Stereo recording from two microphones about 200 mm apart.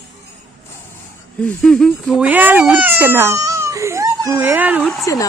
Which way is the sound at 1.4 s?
5° left (ahead or behind).